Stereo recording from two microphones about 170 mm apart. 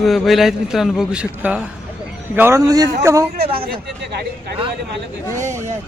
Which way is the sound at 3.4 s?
35° right (ahead or behind).